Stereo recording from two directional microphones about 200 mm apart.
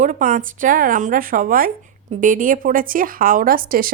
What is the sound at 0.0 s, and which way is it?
A woman's voice, 40° right (ahead or behind).